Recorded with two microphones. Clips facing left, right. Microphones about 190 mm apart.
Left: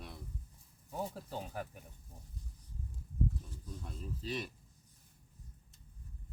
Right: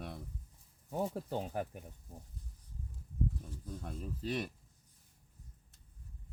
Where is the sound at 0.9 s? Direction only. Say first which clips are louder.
Right 5 dB; 55° right (ahead or behind).